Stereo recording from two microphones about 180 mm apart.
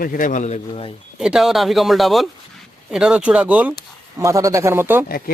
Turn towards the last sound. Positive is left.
turn(degrees=55)  # may be behind; listen again after turning